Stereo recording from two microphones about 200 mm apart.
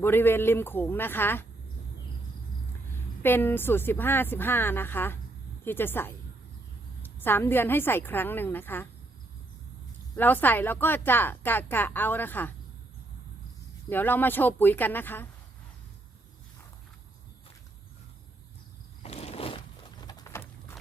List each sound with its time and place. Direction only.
0.0 s a woman's voice: 10° left (ahead or behind)
3.2 s a woman's voice: 10° left (ahead or behind)
10.2 s a woman's voice: 10° left (ahead or behind)
13.9 s a woman's voice: 10° left (ahead or behind)
19.0 s a sound: 30° left (ahead or behind); by 20.7 s 10° left (ahead or behind)